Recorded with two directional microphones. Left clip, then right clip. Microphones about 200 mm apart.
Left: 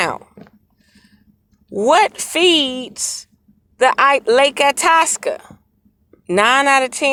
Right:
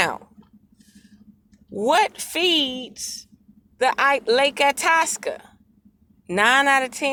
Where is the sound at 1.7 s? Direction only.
30° left (ahead or behind).